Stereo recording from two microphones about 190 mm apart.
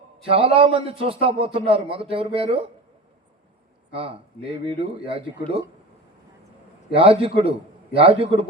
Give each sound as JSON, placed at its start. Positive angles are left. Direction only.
{"t": 0.3, "sound": "a man's voice", "side_deg": -30}
{"t": 3.9, "sound": "a man's voice", "side_deg": -30}
{"t": 6.9, "sound": "a man's voice", "side_deg": -30}